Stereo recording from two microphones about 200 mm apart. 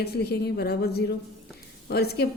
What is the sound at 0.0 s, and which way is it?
A woman's voice, 55° left (ahead or behind).